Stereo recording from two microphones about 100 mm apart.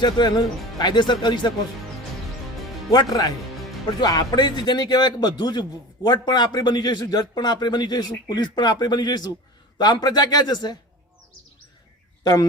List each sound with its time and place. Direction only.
0.0 s a man's voice: 45° left (ahead or behind)
2.9 s a man's voice: 40° left (ahead or behind)
12.2 s a man's voice: 40° left (ahead or behind)